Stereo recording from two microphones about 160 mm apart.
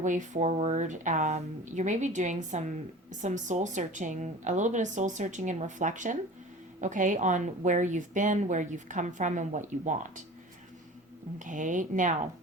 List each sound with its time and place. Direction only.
0.0 s a woman's voice: 50° right (ahead or behind)
11.3 s a woman's voice: 55° right (ahead or behind)